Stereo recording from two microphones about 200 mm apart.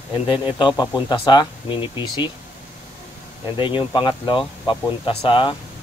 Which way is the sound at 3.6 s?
25° left (ahead or behind).